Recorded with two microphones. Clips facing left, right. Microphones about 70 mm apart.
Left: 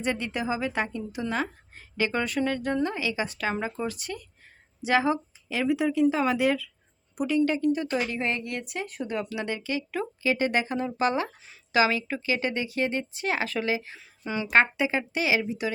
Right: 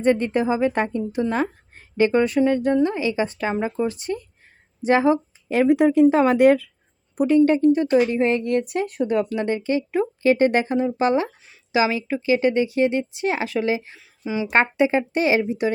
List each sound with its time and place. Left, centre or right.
0.0 s speech: right
5.5 s speech: right
7.2 s speech: right
8.4 s speech: right
10.8 s speech: centre
13.9 s speech: centre
14.5 s speech: right